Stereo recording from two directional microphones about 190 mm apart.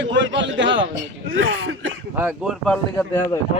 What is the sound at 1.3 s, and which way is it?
Speech, 85° right.